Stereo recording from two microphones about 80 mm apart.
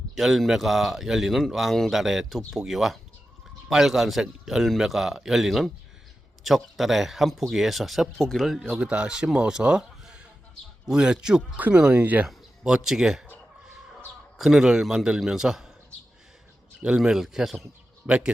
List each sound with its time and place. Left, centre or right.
0.2 s speech: centre
8.8 s speech: centre
12.6 s speech: centre
14.3 s speech: centre
16.8 s speech: centre
18.0 s speech: centre